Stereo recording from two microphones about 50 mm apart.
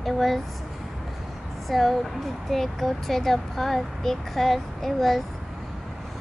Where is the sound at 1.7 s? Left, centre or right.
Centre.